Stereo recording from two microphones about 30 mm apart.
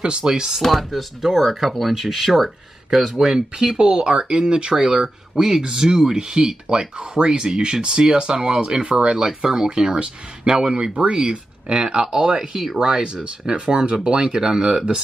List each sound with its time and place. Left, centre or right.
0.0 s speech: right
0.6 s speech: centre
2.9 s speech: centre
3.3 s speech: right
5.3 s speech: centre
5.6 s speech: right